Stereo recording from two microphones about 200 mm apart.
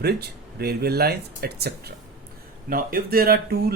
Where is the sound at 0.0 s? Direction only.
50° right (ahead or behind).